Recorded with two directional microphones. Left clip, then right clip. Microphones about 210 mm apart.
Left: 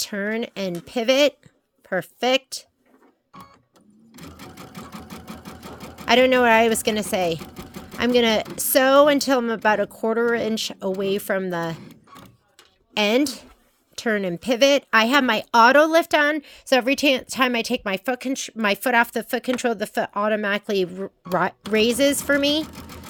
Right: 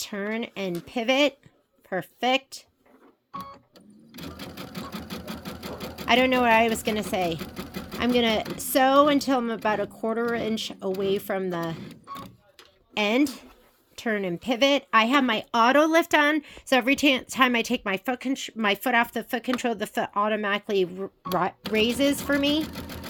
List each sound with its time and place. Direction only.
0.0 s speech: 40° left (ahead or behind)
6.1 s speech: 35° left (ahead or behind)
12.9 s speech: 35° left (ahead or behind)